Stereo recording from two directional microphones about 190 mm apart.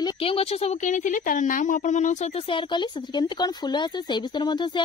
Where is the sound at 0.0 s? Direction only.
30° left (ahead or behind).